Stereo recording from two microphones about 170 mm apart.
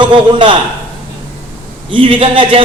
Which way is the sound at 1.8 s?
30° right (ahead or behind).